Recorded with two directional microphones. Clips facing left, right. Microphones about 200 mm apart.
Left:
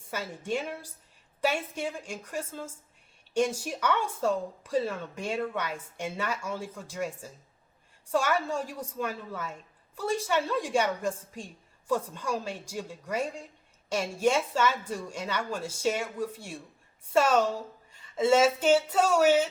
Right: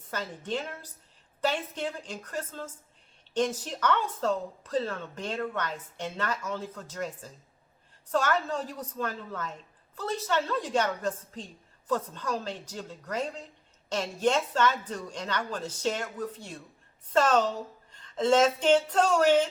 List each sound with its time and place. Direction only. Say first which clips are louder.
0.1 s a woman's voice: left 1 dB; 10° left (ahead or behind)